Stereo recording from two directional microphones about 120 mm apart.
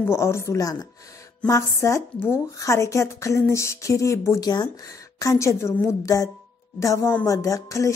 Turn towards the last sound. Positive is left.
turn(degrees=25)  # may be behind; listen again after turning